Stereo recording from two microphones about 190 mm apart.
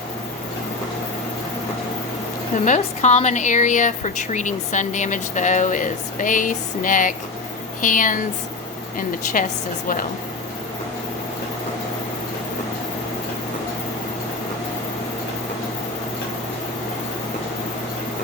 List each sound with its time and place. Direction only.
2.6 s a woman's voice: 40° left (ahead or behind)
9.4 s speech: 45° left (ahead or behind)